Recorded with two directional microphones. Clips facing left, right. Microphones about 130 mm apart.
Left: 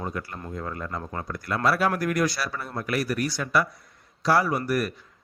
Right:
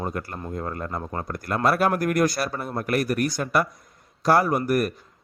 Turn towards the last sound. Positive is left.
turn(degrees=-50)  # may be behind; listen again after turning